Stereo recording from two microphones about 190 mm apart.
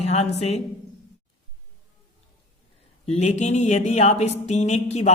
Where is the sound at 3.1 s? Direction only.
35° left (ahead or behind).